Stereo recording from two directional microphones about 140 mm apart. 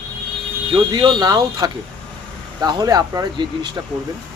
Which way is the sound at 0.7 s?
30° right (ahead or behind).